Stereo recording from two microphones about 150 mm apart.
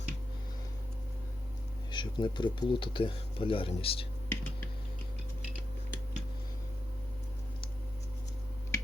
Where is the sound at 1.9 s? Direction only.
30° left (ahead or behind).